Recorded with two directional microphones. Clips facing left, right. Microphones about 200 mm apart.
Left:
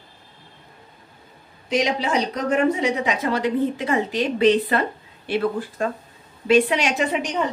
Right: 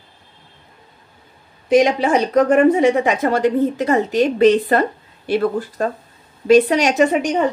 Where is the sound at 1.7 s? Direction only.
50° right (ahead or behind).